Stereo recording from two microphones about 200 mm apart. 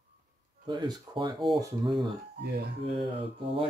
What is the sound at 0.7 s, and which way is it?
Speech, 20° right (ahead or behind).